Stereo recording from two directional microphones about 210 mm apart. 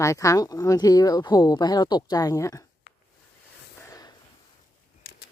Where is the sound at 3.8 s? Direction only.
15° left (ahead or behind).